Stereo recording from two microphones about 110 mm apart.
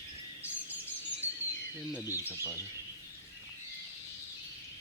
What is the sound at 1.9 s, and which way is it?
Speech, 15° right (ahead or behind).